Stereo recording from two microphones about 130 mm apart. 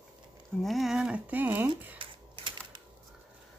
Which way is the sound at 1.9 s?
40° right (ahead or behind).